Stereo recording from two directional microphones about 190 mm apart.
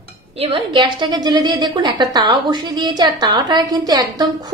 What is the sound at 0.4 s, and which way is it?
A woman's voice, 25° right (ahead or behind).